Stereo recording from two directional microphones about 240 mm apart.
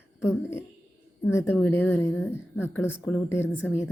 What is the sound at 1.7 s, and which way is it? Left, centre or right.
A woman's voice, centre.